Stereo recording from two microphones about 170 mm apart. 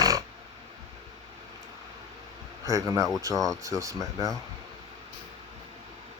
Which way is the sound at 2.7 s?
20° right (ahead or behind).